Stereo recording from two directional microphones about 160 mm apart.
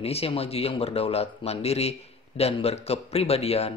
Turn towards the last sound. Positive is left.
turn(degrees=40)  # may be behind; listen again after turning